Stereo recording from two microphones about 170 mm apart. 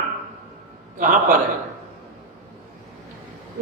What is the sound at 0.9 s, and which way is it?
Speech, 55° right (ahead or behind).